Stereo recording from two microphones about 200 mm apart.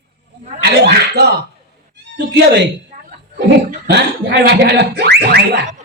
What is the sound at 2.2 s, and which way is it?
Speech, 55° right (ahead or behind).